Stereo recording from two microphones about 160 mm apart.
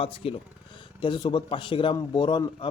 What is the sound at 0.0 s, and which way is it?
Speech, 35° left (ahead or behind).